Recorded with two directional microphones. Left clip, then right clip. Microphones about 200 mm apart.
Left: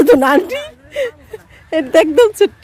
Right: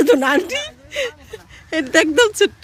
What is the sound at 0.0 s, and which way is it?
A woman's voice, 25° left (ahead or behind).